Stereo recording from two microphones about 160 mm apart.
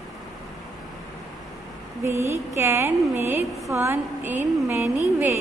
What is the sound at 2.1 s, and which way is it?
A woman's voice, 15° right (ahead or behind).